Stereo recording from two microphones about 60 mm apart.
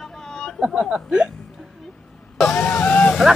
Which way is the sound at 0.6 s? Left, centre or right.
Centre.